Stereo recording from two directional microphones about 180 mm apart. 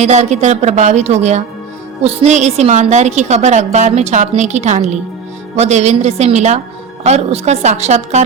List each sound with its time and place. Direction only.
0.0 s a woman's voice: 40° right (ahead or behind)